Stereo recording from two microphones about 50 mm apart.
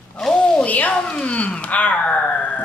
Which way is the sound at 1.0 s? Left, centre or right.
Centre.